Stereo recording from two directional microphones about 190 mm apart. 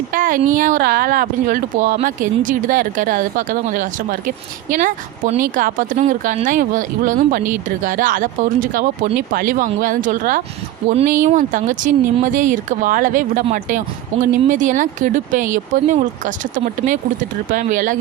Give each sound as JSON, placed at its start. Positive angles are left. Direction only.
{"t": 0.1, "sound": "a woman's voice", "side_deg": -45}